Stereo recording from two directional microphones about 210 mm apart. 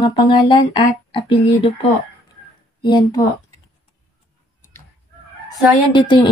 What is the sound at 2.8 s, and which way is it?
Speech, 20° left (ahead or behind).